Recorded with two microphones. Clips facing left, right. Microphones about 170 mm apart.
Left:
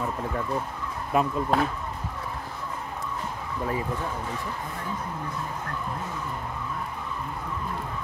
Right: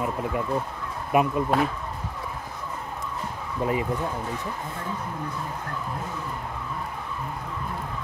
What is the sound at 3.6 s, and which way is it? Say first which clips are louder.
Speech: right 4 dB; 20° right (ahead or behind).